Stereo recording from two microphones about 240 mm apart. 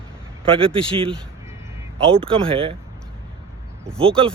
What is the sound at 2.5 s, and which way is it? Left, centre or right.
Speech, right.